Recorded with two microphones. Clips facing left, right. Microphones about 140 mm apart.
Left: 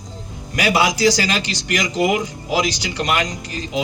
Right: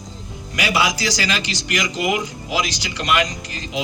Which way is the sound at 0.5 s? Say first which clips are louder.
Left 3 dB; 40° left (ahead or behind).